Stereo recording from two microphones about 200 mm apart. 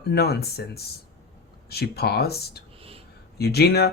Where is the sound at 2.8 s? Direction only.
30° right (ahead or behind).